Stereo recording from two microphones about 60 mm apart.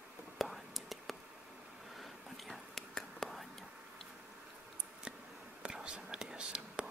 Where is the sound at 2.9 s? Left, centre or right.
Centre.